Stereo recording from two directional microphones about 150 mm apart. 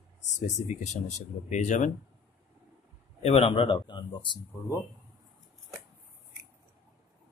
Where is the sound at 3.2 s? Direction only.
40° left (ahead or behind).